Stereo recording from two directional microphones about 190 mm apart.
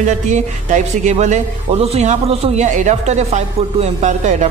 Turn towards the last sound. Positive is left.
turn(degrees=-40)  # may be behind; listen again after turning